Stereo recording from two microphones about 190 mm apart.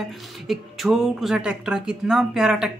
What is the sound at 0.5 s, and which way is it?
Speech, centre (ahead or behind).